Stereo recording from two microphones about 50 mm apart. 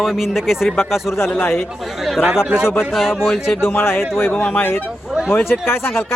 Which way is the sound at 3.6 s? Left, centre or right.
Left.